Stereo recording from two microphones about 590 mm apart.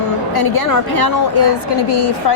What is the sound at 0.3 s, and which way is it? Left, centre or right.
A woman's voice, left.